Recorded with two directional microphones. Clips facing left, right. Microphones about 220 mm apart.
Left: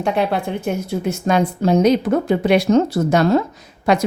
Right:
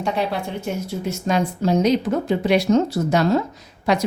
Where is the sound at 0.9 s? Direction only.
55° left (ahead or behind).